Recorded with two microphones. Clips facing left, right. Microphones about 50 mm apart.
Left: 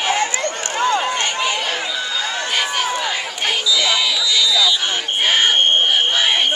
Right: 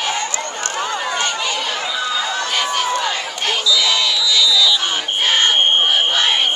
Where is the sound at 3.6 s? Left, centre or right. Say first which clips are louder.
Right 1 dB; centre.